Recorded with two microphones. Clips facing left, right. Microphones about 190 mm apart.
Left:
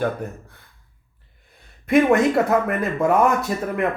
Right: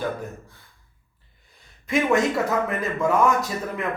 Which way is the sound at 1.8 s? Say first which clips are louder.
Left 5 dB; 55° left (ahead or behind).